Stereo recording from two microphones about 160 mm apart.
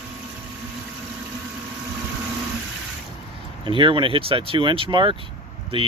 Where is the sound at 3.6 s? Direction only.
30° right (ahead or behind).